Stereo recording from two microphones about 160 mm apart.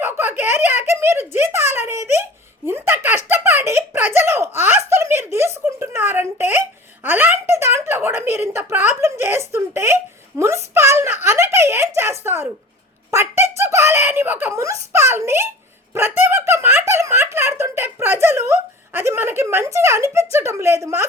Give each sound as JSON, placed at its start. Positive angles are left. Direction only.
{"t": 0.0, "sound": "speech", "side_deg": -15}
{"t": 2.6, "sound": "giggle", "side_deg": -15}
{"t": 7.0, "sound": "a sound", "side_deg": -10}